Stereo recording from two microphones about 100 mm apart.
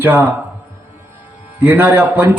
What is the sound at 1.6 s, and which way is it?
Speech, 15° right (ahead or behind).